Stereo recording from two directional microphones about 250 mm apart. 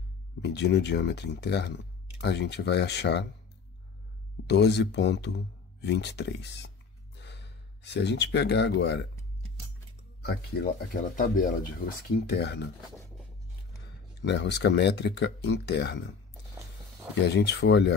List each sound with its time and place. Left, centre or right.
0.4 s speech: left
4.5 s speech: left
10.2 s speech: left
14.2 s speech: left
17.1 s speech: left